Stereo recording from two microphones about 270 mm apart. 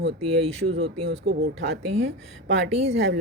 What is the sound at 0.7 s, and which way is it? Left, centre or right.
Speech, right.